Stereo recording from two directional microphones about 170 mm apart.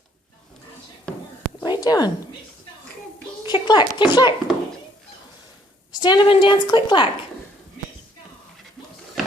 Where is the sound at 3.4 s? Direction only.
25° left (ahead or behind).